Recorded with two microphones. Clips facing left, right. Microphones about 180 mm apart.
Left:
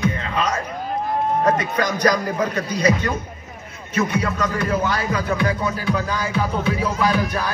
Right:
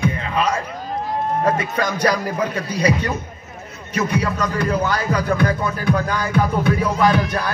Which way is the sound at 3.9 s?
35° right (ahead or behind).